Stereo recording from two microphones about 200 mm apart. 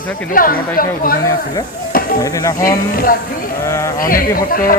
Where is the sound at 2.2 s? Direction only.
15° left (ahead or behind).